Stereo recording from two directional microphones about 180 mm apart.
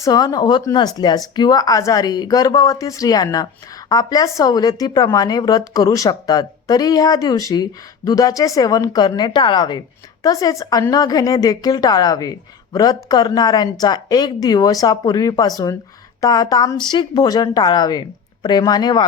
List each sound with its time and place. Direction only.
0.0 s a woman's voice: 20° left (ahead or behind)